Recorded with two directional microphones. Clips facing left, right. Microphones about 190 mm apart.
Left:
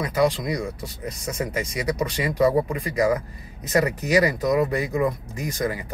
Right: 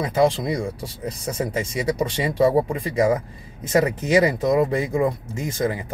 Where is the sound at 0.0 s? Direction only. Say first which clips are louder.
Right 2 dB; 25° right (ahead or behind).